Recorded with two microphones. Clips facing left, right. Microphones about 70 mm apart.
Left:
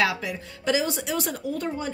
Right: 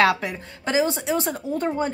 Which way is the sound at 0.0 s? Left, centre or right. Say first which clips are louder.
Right 5 dB; right.